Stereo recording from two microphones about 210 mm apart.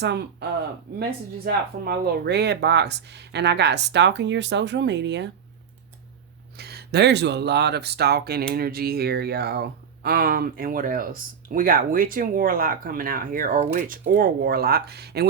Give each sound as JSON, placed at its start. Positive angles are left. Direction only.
{"t": 0.0, "sound": "speech", "side_deg": -55}
{"t": 1.5, "sound": "speech", "side_deg": -50}
{"t": 6.6, "sound": "speech", "side_deg": -50}